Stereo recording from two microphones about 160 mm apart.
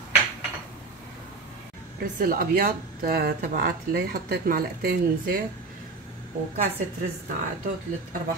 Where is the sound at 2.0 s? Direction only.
65° right (ahead or behind).